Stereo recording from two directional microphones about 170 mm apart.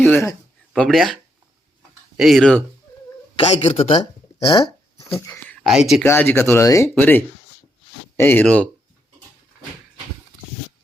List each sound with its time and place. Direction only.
0.0 s speech: 15° left (ahead or behind)
0.7 s speech: centre (ahead or behind)
2.1 s speech: centre (ahead or behind)
3.3 s speech: 35° left (ahead or behind)
4.4 s a sound: 25° left (ahead or behind)
5.6 s speech: centre (ahead or behind)
6.1 s speech: 15° left (ahead or behind)